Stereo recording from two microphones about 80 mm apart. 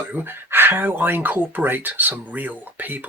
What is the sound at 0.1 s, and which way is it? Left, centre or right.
Speech, right.